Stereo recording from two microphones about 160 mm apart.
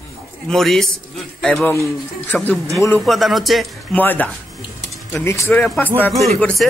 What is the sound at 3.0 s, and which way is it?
Speech, centre (ahead or behind).